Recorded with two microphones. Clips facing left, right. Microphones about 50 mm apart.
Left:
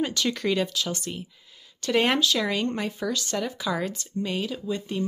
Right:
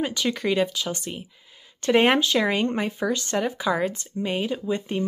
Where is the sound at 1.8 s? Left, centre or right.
Right.